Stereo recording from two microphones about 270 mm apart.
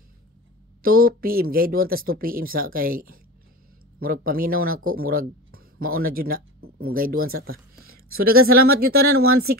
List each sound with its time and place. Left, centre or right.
0.8 s speech: right